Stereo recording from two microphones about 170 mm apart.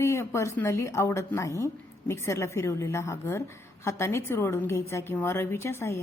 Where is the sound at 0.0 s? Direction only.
15° left (ahead or behind).